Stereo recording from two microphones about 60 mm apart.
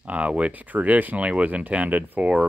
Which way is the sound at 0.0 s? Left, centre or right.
Right.